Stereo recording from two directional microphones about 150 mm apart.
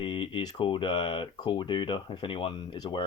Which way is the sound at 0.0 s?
35° left (ahead or behind).